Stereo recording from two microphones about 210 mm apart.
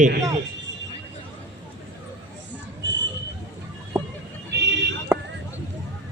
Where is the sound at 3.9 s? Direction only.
10° right (ahead or behind).